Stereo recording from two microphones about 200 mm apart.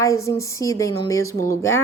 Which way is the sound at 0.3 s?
15° left (ahead or behind).